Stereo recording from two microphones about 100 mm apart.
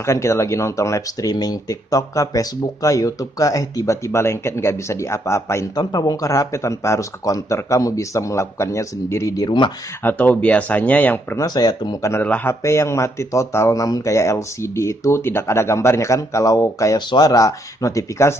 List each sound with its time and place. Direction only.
0.0 s speech: 30° left (ahead or behind)
5.8 s speech: 40° left (ahead or behind)
10.0 s speech: 15° left (ahead or behind)
11.3 s speech: 40° left (ahead or behind)
12.2 s speech: 15° left (ahead or behind)
12.6 s speech: 30° left (ahead or behind)